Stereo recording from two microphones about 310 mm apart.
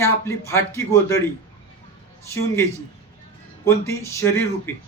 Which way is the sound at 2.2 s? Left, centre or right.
Centre.